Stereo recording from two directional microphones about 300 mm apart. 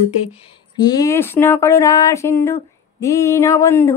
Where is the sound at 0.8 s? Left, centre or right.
Centre.